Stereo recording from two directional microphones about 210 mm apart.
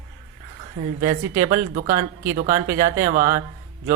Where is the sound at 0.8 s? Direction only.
40° right (ahead or behind).